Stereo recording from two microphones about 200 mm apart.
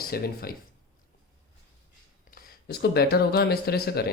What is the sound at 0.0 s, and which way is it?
Speech, 50° left (ahead or behind).